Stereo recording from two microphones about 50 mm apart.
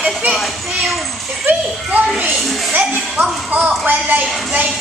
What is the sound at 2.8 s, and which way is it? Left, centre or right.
A woman's voice, right.